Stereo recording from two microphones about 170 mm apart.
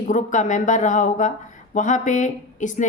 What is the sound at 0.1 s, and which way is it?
A woman's voice, 45° left (ahead or behind).